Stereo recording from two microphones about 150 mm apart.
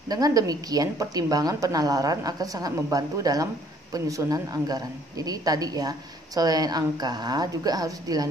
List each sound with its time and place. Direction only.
0.1 s a woman's voice: 25° right (ahead or behind)